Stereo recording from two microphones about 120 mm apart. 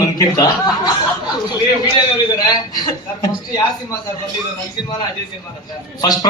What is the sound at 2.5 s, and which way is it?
A man's voice, 35° left (ahead or behind).